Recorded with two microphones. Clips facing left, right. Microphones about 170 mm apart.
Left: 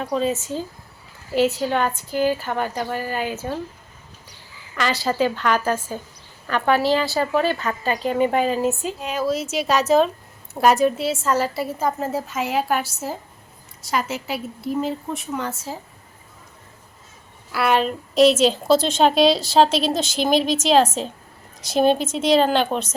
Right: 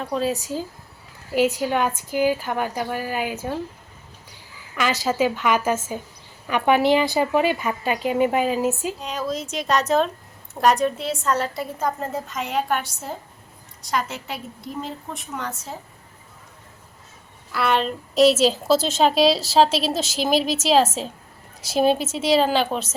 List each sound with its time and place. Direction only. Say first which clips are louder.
0.0 s a woman's voice: left 2 dB; centre (ahead or behind)
1.3 s a woman's voice: left 1 dB; 10° right (ahead or behind)
4.7 s a woman's voice: even; 5° right (ahead or behind)
17.5 s a woman's voice: left 2 dB; 5° left (ahead or behind)